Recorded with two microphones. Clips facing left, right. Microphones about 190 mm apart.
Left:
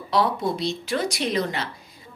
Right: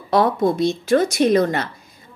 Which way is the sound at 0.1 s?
50° right (ahead or behind).